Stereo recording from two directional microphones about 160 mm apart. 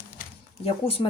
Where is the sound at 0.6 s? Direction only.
35° left (ahead or behind).